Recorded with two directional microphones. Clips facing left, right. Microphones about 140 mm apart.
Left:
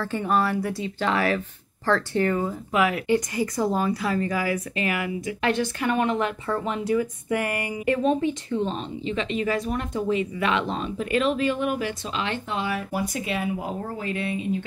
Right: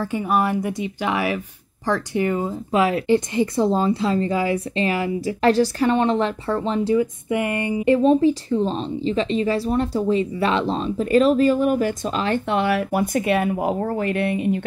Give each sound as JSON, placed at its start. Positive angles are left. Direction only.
{"t": 0.0, "sound": "speech", "side_deg": -10}
{"t": 12.4, "sound": "speech", "side_deg": -70}